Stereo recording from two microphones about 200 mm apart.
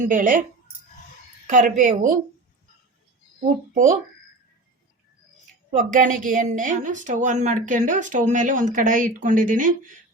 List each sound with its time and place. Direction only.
0.0 s a woman's voice: 40° right (ahead or behind)
1.5 s a woman's voice: 40° right (ahead or behind)
5.7 s a woman's voice: 40° right (ahead or behind)